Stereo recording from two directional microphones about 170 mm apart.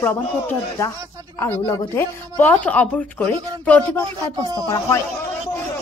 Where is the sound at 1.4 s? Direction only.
15° left (ahead or behind).